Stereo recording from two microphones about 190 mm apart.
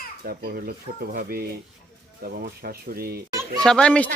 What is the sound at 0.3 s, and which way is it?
Speech, 55° right (ahead or behind).